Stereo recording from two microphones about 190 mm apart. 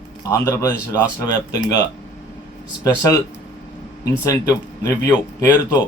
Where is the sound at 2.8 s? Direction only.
15° left (ahead or behind).